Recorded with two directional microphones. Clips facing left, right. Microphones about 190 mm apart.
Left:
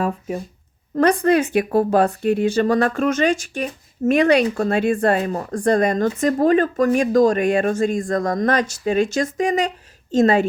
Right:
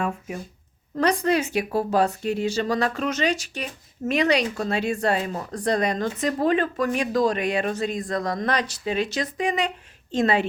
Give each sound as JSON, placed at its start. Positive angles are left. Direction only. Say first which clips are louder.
{"t": 0.9, "sound": "speech", "louder": "left 6 dB", "side_deg": 55}